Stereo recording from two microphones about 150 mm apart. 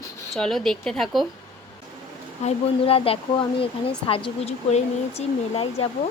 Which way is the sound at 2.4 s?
40° left (ahead or behind).